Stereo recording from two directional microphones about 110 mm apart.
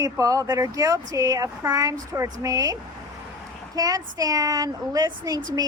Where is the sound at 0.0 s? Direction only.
30° right (ahead or behind).